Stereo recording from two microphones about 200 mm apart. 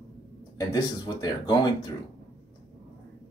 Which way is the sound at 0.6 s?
20° left (ahead or behind).